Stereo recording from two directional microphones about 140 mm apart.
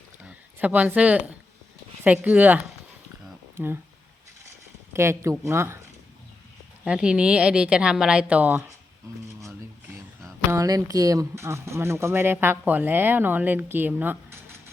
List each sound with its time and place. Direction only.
0.3 s speech: 10° right (ahead or behind)
3.6 s speech: 15° right (ahead or behind)
4.9 s speech: 20° right (ahead or behind)
6.8 s speech: 5° right (ahead or behind)
10.2 s speech: 20° right (ahead or behind)